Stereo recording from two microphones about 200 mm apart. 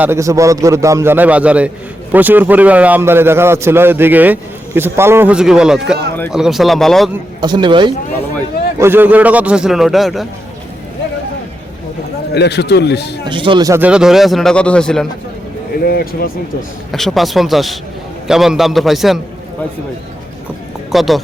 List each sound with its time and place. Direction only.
0.0 s a man's voice: 15° right (ahead or behind); by 7.1 s centre (ahead or behind)
7.4 s speech: 20° right (ahead or behind)
8.8 s speech: 10° right (ahead or behind)
12.3 s a man's voice: 55° left (ahead or behind)
13.2 s speech: 25° right (ahead or behind); by 15.0 s 5° left (ahead or behind)
15.8 s speech: 50° left (ahead or behind)
16.9 s speech: centre (ahead or behind)
20.9 s speech: centre (ahead or behind)